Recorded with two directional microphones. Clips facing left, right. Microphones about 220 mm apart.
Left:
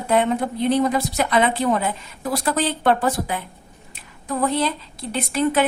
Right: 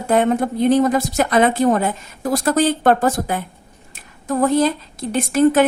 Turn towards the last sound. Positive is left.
turn(degrees=-45)  # may be behind; listen again after turning